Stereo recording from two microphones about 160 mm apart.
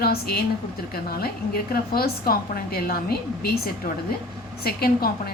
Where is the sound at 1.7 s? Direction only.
70° left (ahead or behind).